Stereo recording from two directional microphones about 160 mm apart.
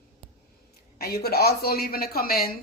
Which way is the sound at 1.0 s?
75° left (ahead or behind).